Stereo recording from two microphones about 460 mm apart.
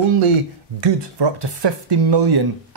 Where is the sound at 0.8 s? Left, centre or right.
Right.